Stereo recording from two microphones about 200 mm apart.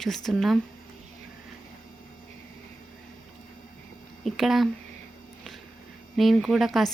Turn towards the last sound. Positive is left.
turn(degrees=0)  # may be behind; listen again after turning